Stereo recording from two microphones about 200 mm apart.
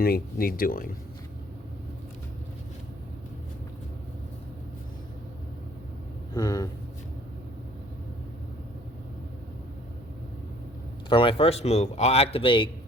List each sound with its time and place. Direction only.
0.0 s speech: 50° left (ahead or behind)
6.3 s speech: 15° left (ahead or behind)
11.1 s speech: 25° left (ahead or behind)